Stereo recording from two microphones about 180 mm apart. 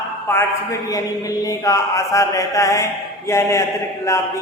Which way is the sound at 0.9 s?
20° left (ahead or behind).